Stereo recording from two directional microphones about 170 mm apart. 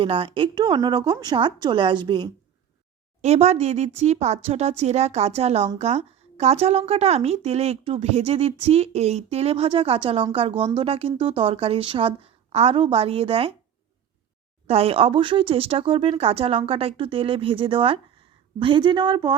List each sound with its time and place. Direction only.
0.0 s speech: 30° right (ahead or behind)
3.2 s speech: 40° right (ahead or behind)
14.7 s speech: 35° right (ahead or behind)